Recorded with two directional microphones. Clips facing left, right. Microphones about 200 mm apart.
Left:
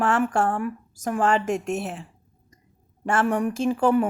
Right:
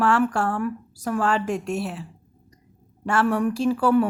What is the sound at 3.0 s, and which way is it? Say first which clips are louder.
Speech: right 1 dB; 45° left (ahead or behind).